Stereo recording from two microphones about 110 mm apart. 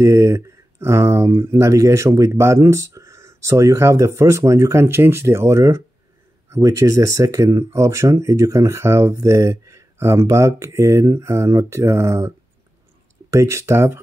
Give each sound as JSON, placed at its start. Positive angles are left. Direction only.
{"t": 0.0, "sound": "speech", "side_deg": -25}
{"t": 13.3, "sound": "speech", "side_deg": -25}